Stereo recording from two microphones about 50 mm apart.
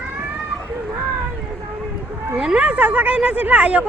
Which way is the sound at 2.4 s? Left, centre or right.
Centre.